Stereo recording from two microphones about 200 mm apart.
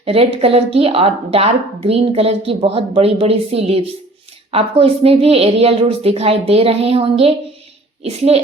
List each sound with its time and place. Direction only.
0.0 s a woman's voice: 30° right (ahead or behind)